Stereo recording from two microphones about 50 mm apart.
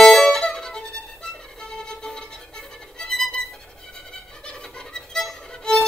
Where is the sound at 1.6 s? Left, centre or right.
Centre.